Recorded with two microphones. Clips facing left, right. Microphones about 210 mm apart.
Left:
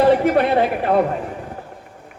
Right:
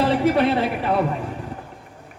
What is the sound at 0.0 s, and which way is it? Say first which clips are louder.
A woman's voice: left 3 dB; 50° left (ahead or behind).